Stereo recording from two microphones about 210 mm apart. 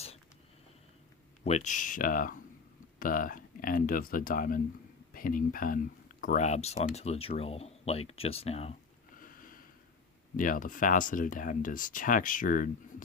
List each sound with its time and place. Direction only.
1.5 s speech: 35° left (ahead or behind)
9.1 s a sound: 40° left (ahead or behind)
10.3 s speech: 40° left (ahead or behind)